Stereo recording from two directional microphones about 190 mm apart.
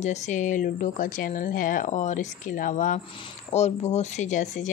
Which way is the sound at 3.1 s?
30° left (ahead or behind).